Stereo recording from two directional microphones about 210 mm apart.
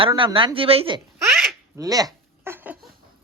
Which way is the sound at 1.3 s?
Centre (ahead or behind).